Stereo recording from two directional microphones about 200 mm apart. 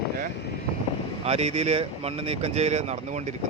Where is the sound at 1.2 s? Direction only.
30° right (ahead or behind).